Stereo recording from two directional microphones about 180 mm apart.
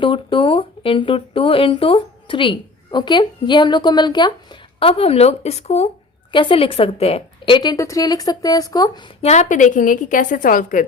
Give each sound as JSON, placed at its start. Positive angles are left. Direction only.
{"t": 0.0, "sound": "speech", "side_deg": 30}
{"t": 9.2, "sound": "a woman's voice", "side_deg": 40}